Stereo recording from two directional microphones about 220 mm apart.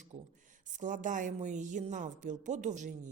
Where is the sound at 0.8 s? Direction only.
35° right (ahead or behind).